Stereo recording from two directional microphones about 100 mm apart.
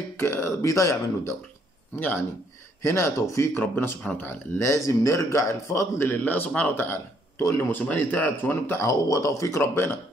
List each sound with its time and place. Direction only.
0.2 s a man's voice: 25° left (ahead or behind)
2.0 s speech: 20° left (ahead or behind)